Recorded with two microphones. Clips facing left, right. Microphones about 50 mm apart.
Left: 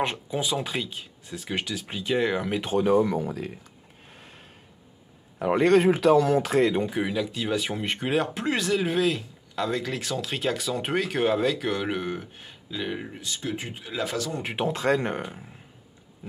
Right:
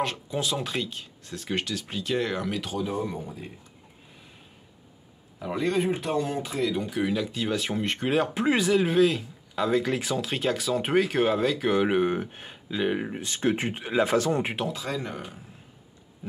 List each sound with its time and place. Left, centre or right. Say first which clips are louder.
0.3 s speech: left 1 dB; centre
2.8 s speech: left 8 dB; left
4.1 s a sound: left 5 dB; left
5.4 s speech: left 7 dB; left
6.6 s speech: left 4 dB; left
7.0 s speech: even; centre
11.7 s speech: right 5 dB; centre
12.2 s speech: right 6 dB; right
12.7 s speech: right 5 dB; centre
13.2 s speech: right 6 dB; right
14.7 s speech: left 7 dB; left